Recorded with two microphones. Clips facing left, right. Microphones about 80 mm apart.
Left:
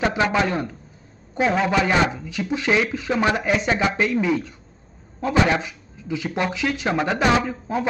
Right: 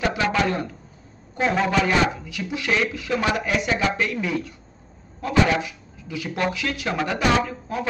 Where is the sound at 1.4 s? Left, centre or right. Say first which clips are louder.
Left 2 dB; centre.